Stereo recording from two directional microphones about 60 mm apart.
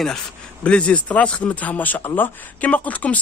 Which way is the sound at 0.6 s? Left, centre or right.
Centre.